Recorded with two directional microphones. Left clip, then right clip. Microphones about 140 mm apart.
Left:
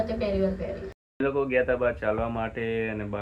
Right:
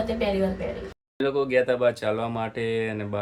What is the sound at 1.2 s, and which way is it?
Speech, 25° right (ahead or behind).